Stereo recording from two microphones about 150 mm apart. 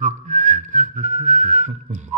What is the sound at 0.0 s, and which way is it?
Whistling, 55° right (ahead or behind).